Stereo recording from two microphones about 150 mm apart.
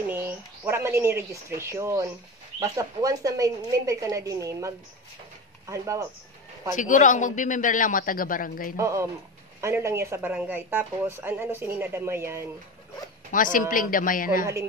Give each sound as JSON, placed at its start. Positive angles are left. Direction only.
{"t": 0.0, "sound": "speech", "side_deg": -15}
{"t": 6.7, "sound": "a man's voice", "side_deg": 55}
{"t": 8.7, "sound": "speech", "side_deg": -20}
{"t": 13.3, "sound": "a man's voice", "side_deg": 60}